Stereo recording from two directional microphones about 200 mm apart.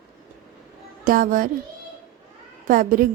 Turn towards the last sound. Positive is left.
turn(degrees=-45)  # may be behind; listen again after turning